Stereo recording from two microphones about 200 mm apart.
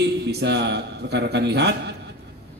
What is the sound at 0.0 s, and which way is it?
A man's voice, 55° right (ahead or behind).